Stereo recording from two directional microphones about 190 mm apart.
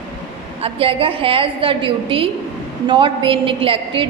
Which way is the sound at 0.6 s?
30° right (ahead or behind).